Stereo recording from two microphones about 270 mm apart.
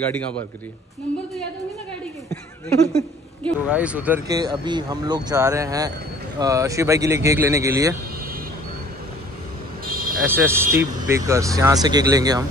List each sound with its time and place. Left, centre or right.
2.9 s a woman's voice: centre
3.6 s speech: centre
9.8 s a sound: right
10.2 s speech: centre